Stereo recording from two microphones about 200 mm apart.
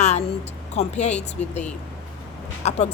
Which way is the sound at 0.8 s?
35° left (ahead or behind).